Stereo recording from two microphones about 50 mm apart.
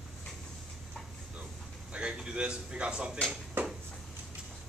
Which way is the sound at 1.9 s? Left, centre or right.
Centre.